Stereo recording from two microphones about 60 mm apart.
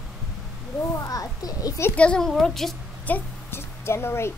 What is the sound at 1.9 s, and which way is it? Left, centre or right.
Speech, centre.